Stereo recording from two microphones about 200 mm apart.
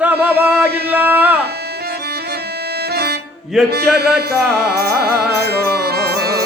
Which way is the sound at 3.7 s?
50° right (ahead or behind).